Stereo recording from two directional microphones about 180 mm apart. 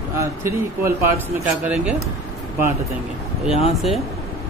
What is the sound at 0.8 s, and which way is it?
Speech, 15° right (ahead or behind).